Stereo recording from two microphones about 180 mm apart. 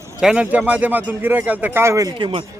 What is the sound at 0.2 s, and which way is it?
A man's voice, 5° right (ahead or behind).